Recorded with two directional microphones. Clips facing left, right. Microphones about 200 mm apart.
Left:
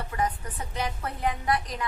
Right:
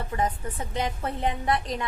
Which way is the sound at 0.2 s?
25° right (ahead or behind).